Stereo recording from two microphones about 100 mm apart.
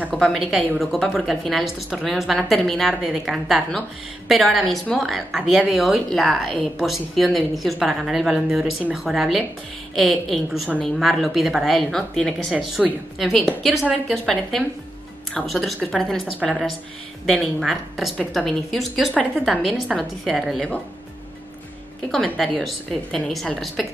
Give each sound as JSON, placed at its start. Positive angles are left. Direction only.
{"t": 0.1, "sound": "speech", "side_deg": 0}
{"t": 22.1, "sound": "speech", "side_deg": 0}